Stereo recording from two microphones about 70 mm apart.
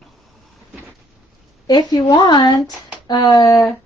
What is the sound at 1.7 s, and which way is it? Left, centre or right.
A woman's voice, left.